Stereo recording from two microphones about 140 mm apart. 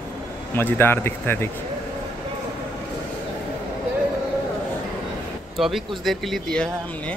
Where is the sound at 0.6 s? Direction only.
15° left (ahead or behind).